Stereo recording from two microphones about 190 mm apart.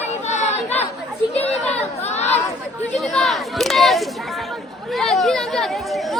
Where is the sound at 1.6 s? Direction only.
35° left (ahead or behind).